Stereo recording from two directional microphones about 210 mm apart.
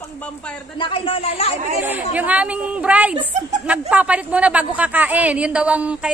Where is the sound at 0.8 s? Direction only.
25° left (ahead or behind).